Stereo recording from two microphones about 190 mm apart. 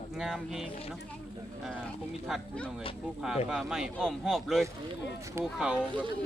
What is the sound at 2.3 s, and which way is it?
Speech, 5° left (ahead or behind).